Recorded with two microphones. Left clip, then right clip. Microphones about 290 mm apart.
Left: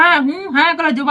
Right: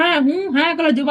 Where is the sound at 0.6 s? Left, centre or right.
Centre.